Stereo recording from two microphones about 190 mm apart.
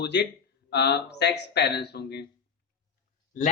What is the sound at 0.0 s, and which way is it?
Speech, 65° left (ahead or behind).